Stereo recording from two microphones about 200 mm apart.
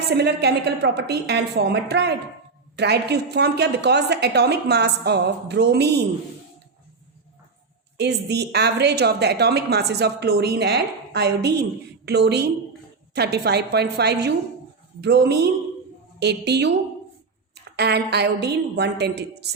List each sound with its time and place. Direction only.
0.1 s a woman's voice: 55° right (ahead or behind)
7.9 s a woman's voice: 55° right (ahead or behind)